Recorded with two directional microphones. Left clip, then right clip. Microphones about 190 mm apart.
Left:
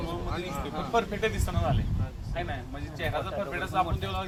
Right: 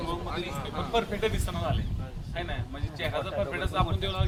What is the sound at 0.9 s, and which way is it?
Speech, 15° right (ahead or behind).